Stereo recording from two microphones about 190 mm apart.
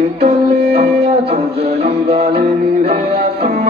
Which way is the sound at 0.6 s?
55° right (ahead or behind).